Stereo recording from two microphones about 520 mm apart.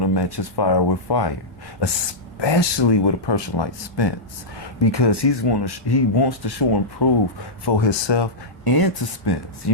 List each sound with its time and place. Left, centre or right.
0.0 s speech: left
2.4 s speech: left